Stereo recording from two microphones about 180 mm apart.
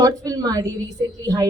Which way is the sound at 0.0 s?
20° right (ahead or behind).